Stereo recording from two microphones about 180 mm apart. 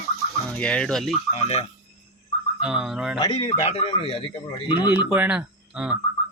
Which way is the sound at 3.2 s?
30° left (ahead or behind).